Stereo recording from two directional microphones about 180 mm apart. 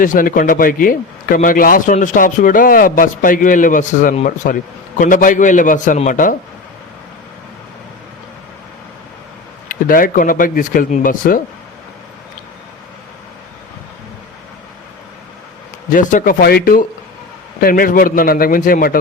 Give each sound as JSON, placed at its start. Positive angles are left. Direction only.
{"t": 0.0, "sound": "a man's voice", "side_deg": 50}
{"t": 9.6, "sound": "a man's voice", "side_deg": 50}
{"t": 15.9, "sound": "a man's voice", "side_deg": 50}